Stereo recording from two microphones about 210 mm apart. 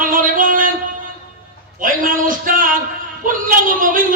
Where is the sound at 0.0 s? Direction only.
40° right (ahead or behind).